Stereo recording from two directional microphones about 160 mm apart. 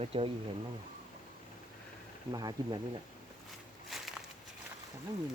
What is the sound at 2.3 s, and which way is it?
Speech, 25° right (ahead or behind).